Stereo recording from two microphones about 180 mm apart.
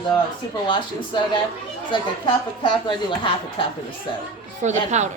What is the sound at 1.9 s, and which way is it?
Speech, 25° left (ahead or behind).